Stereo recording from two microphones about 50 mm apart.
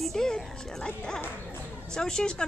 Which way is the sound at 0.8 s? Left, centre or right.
Centre.